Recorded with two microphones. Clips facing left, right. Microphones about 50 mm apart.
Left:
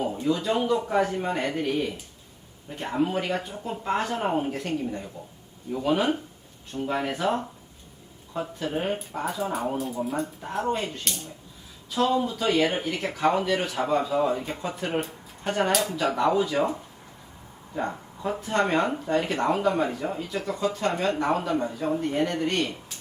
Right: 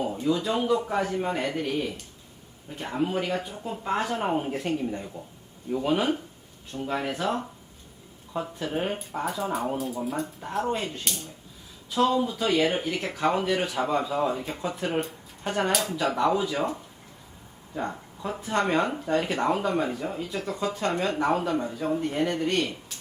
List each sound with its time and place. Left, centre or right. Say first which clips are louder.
0.1 s speech: left 1 dB; centre
4.5 s speech: right 1 dB; centre
5.7 s speech: left 1 dB; centre
8.3 s speech: left 1 dB; centre
17.7 s speech: left 2 dB; centre
18.3 s speech: even; centre
18.6 s speech: left 2 dB; centre